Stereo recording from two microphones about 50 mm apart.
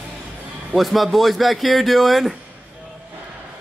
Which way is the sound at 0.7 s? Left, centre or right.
Centre.